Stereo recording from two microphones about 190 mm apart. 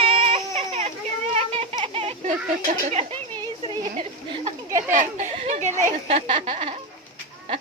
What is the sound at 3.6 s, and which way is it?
Speech, 30° right (ahead or behind).